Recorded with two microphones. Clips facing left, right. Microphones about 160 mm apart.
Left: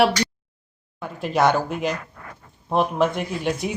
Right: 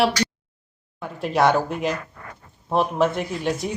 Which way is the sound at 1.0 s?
Centre (ahead or behind).